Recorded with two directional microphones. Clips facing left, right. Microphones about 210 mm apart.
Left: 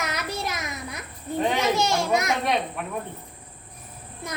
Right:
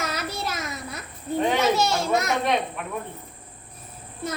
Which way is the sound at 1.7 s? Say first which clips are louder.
Even; 15° left (ahead or behind).